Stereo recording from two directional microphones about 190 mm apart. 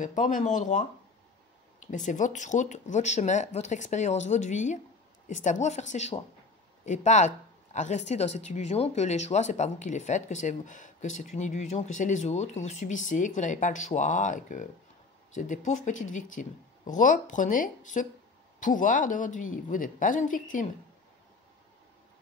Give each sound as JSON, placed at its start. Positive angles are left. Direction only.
{"t": 0.0, "sound": "a woman's voice", "side_deg": 40}